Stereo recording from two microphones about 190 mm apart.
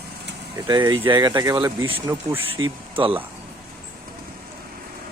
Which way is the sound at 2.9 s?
25° right (ahead or behind).